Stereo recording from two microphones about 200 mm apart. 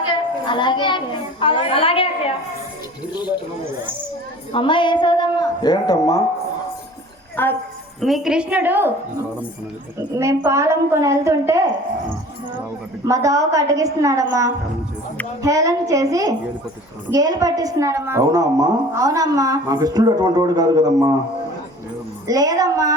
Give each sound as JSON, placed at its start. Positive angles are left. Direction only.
{"t": 0.1, "sound": "a child's voice", "side_deg": 25}
{"t": 4.5, "sound": "female singing", "side_deg": 25}
{"t": 7.4, "sound": "speech", "side_deg": 10}
{"t": 8.0, "sound": "a woman's voice", "side_deg": 0}
{"t": 10.0, "sound": "a woman's voice", "side_deg": -15}
{"t": 13.1, "sound": "a woman's voice", "side_deg": -15}
{"t": 22.3, "sound": "a woman's voice", "side_deg": -20}